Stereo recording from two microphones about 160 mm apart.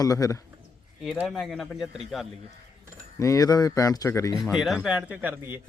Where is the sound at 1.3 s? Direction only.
Centre (ahead or behind).